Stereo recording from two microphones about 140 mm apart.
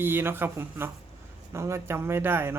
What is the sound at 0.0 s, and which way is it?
Speech, 15° right (ahead or behind).